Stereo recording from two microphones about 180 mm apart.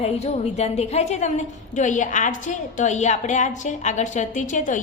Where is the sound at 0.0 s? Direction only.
35° left (ahead or behind).